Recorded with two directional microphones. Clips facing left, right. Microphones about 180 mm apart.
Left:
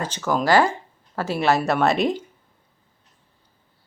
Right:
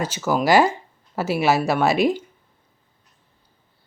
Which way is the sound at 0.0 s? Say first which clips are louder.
Right 2 dB; 10° right (ahead or behind).